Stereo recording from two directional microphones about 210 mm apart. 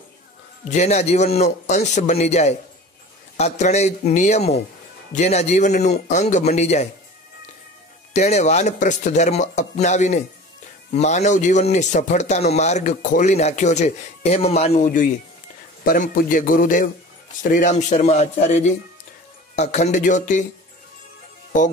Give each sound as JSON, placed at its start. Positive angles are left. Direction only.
{"t": 0.7, "sound": "a man's voice", "side_deg": 30}
{"t": 8.1, "sound": "a man's voice", "side_deg": 35}
{"t": 21.5, "sound": "a man's voice", "side_deg": 35}